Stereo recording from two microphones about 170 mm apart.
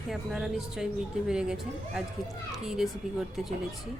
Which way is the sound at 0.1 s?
Centre (ahead or behind).